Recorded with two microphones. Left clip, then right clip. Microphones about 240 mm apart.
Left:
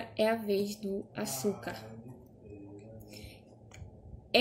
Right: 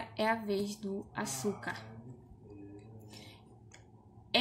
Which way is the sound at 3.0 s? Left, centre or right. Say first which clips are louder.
Left 2 dB; centre.